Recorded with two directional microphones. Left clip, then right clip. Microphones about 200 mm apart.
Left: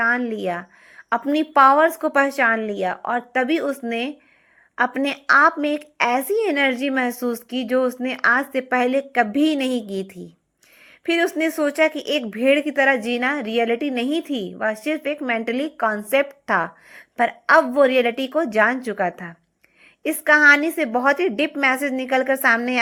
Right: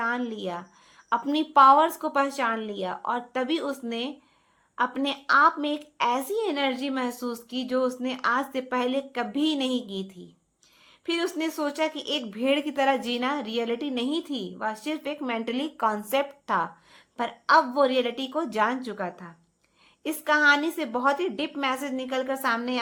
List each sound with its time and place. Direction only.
0.0 s a woman's voice: 15° left (ahead or behind)
10.2 s speech: 60° left (ahead or behind)
11.0 s a woman's voice: 20° left (ahead or behind)